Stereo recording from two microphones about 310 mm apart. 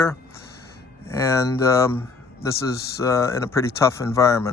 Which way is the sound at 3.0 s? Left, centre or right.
Centre.